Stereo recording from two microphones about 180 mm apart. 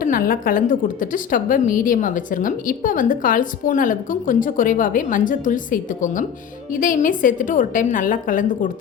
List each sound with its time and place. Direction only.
0.0 s a woman's voice: 50° left (ahead or behind)